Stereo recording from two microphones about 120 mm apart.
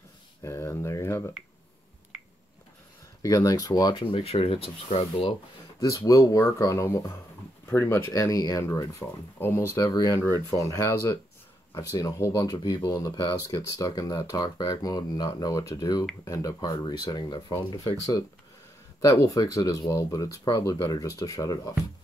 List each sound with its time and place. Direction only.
0.4 s a sound: 25° left (ahead or behind)
3.2 s speech: 30° left (ahead or behind)
3.9 s speech: 45° left (ahead or behind)
5.8 s speech: 30° left (ahead or behind)
18.9 s speech: 30° left (ahead or behind)